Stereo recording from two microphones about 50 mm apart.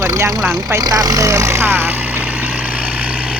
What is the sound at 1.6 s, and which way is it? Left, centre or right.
Vehicle, right.